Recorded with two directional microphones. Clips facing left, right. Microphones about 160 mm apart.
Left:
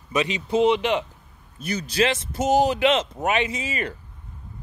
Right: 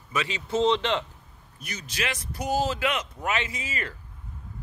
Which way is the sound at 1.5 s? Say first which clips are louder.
Left 11 dB; 35° left (ahead or behind).